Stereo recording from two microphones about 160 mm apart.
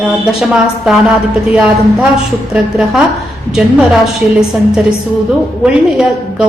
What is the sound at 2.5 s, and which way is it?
A woman's voice, 5° right (ahead or behind).